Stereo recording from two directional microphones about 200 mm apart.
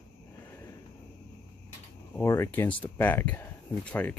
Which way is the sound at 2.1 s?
15° left (ahead or behind).